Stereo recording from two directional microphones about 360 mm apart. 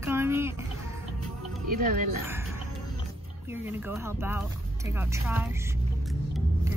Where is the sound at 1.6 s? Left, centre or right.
Right.